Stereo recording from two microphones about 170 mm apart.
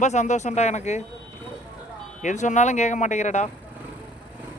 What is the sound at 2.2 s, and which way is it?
Speech, 45° left (ahead or behind).